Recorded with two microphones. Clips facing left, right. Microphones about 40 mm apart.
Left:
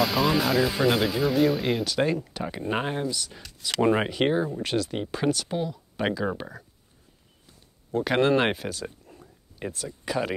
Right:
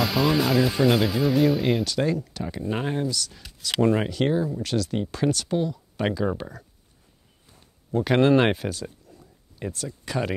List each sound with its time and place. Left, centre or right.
0.0 s speech: centre
2.0 s speech: centre
7.9 s speech: centre
9.0 s a sound: left
9.6 s speech: centre